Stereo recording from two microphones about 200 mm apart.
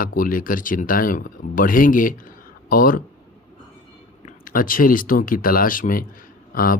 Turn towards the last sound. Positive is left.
turn(degrees=45)  # may be behind; listen again after turning